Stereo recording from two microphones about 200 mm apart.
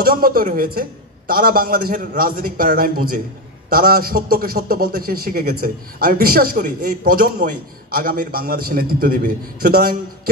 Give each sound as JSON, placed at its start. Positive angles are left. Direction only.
{"t": 0.0, "sound": "a man's voice", "side_deg": -45}